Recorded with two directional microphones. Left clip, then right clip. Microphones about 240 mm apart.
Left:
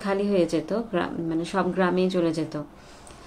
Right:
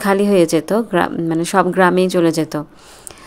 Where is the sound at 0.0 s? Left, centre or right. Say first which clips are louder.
Right 10 dB; right.